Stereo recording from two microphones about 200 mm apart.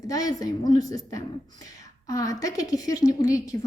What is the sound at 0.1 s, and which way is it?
A woman's voice, 15° left (ahead or behind).